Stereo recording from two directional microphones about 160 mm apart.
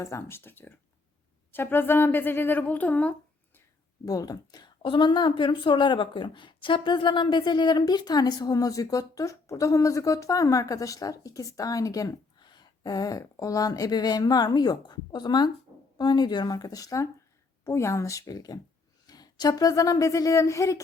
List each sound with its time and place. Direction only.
0.0 s speech: 20° left (ahead or behind)
4.0 s a woman's voice: 20° left (ahead or behind)